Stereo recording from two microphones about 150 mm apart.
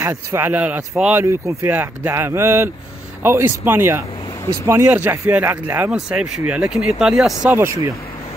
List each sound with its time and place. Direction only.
0.0 s speech: 20° right (ahead or behind)
7.4 s speech: 15° right (ahead or behind)